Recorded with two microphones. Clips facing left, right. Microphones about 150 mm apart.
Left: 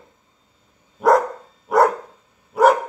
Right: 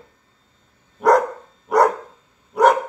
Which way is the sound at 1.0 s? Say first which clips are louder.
Even; centre (ahead or behind).